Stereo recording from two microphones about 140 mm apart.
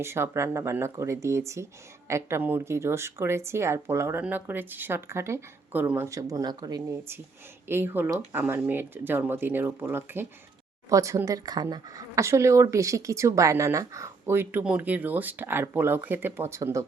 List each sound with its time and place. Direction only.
0.0 s a woman's voice: 20° right (ahead or behind)